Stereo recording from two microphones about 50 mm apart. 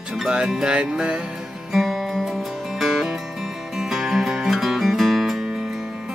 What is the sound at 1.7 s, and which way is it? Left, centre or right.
Music, centre.